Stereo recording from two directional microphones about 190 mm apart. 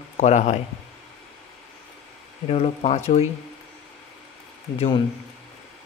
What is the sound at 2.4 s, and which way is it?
Speech, 30° left (ahead or behind).